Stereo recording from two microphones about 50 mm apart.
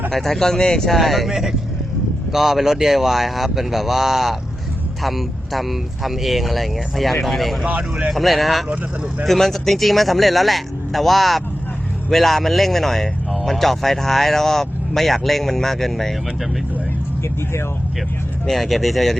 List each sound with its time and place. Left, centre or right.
0.1 s speech: centre
0.9 s speech: centre
7.6 s speech: centre
8.1 s speech: centre
18.4 s speech: centre